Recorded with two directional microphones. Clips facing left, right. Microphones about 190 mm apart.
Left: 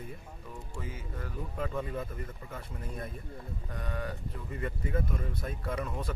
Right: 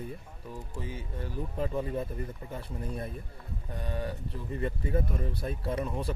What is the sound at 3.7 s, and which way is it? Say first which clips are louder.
A man's voice: right 3 dB; 30° right (ahead or behind).